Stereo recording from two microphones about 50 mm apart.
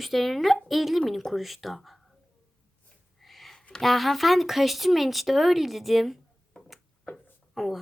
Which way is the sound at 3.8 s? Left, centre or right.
Centre.